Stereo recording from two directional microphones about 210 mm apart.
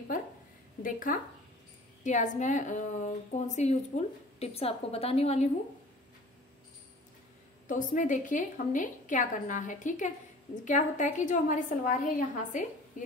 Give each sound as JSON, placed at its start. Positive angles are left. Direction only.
{"t": 0.8, "sound": "a woman's voice", "side_deg": 40}
{"t": 7.6, "sound": "a woman's voice", "side_deg": 40}